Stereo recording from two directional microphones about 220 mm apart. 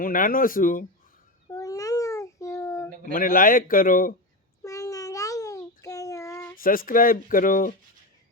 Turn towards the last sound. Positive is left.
turn(degrees=40)  # may be behind; listen again after turning